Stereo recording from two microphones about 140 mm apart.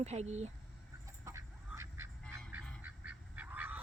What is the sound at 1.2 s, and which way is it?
Duck, 20° right (ahead or behind).